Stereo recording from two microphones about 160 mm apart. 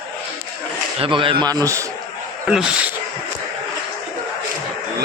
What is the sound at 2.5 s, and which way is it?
Speech, 5° right (ahead or behind).